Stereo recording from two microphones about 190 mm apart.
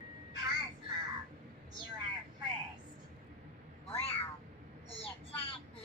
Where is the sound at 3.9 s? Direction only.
30° left (ahead or behind).